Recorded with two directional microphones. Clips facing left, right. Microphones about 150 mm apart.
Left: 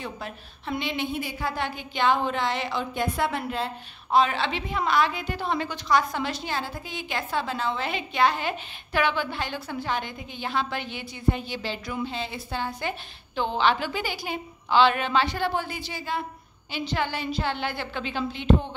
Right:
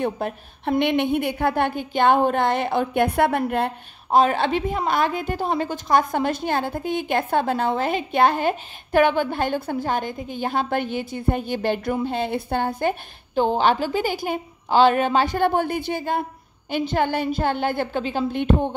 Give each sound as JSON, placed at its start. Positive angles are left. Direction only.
{"t": 0.0, "sound": "a woman's voice", "side_deg": -55}